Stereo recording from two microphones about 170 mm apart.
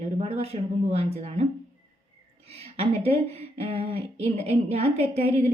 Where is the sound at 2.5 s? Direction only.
35° right (ahead or behind).